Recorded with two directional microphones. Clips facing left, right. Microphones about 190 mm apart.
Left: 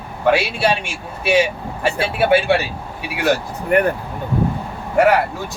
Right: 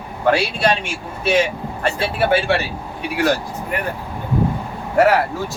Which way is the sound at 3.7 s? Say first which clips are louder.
Left 10 dB; 55° left (ahead or behind).